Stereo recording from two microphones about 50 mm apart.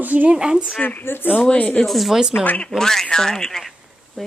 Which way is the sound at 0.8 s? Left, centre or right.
Left.